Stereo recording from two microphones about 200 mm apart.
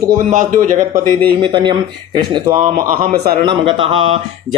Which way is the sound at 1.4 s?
25° right (ahead or behind).